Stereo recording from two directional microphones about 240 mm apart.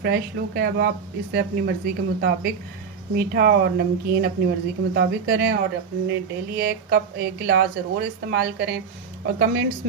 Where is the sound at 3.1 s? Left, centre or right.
Right.